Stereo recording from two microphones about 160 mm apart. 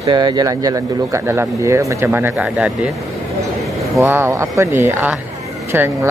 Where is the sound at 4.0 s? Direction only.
15° right (ahead or behind).